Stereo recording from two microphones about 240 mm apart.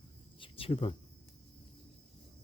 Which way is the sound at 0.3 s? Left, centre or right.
Left.